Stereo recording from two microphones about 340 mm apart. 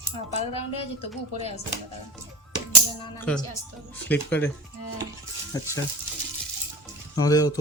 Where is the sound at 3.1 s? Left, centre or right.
Centre.